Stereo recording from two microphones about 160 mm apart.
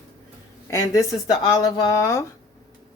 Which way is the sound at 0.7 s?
20° left (ahead or behind).